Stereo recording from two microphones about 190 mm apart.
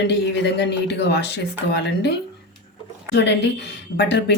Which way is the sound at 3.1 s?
65° left (ahead or behind).